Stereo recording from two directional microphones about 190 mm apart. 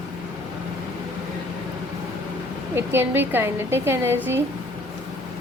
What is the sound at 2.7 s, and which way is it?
A woman's voice, 10° right (ahead or behind).